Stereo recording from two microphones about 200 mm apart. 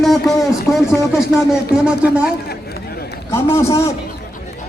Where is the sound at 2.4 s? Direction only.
50° left (ahead or behind).